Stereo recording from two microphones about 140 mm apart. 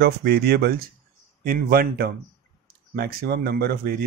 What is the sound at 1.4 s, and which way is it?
A man's voice, 90° right.